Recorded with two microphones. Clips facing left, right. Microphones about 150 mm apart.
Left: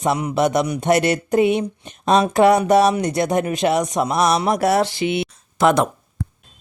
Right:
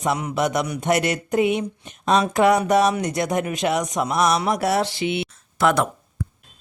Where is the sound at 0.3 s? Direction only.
30° left (ahead or behind).